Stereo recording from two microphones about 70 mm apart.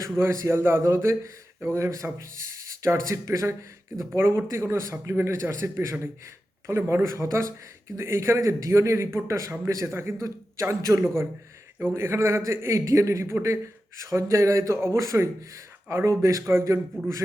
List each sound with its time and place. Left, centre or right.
0.2 s speech: right
4.1 s speech: right